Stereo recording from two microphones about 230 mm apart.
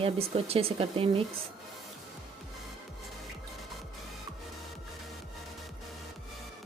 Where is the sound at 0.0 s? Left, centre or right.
Right.